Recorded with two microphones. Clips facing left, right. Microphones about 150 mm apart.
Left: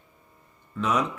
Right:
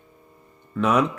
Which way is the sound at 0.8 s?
60° right (ahead or behind).